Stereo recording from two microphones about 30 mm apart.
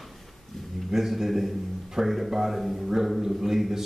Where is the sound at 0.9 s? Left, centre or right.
Centre.